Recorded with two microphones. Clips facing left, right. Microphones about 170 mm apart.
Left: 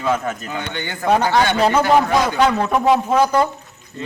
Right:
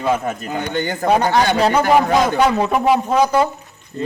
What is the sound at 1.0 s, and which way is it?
Speech, 10° right (ahead or behind).